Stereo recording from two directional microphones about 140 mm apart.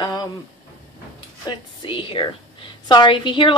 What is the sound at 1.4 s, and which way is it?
Speech, 35° left (ahead or behind).